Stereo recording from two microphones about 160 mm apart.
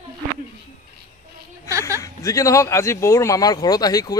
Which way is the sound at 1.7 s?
20° right (ahead or behind).